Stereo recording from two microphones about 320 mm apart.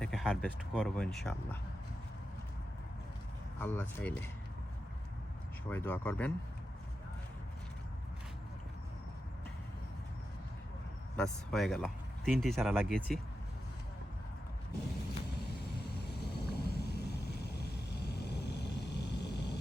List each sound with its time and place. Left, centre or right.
0.0 s speech: centre
3.6 s speech: centre
5.6 s speech: centre
11.2 s speech: centre
16.5 s vehicle: left